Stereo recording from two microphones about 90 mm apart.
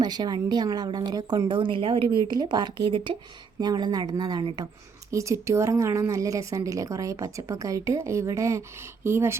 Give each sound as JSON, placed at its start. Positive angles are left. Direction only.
{"t": 0.0, "sound": "a woman's voice", "side_deg": -50}
{"t": 1.5, "sound": "speech", "side_deg": -70}
{"t": 3.6, "sound": "a woman's voice", "side_deg": -50}
{"t": 5.1, "sound": "a woman's voice", "side_deg": -35}